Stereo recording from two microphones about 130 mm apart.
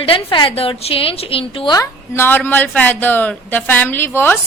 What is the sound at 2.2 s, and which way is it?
Speech, 15° left (ahead or behind).